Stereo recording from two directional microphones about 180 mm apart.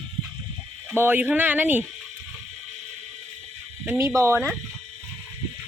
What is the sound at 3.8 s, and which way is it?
Speech, 15° right (ahead or behind).